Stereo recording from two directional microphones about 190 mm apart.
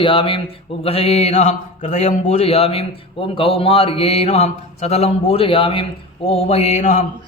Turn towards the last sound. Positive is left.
turn(degrees=40)  # may be behind; listen again after turning